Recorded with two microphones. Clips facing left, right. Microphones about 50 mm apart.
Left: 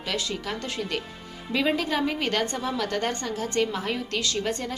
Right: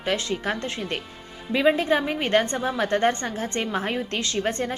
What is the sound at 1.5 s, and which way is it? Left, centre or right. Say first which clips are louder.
A woman's voice: right 5 dB; right.